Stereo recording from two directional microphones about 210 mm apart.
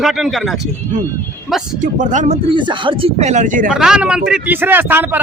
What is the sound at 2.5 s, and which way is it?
Speech, 25° right (ahead or behind).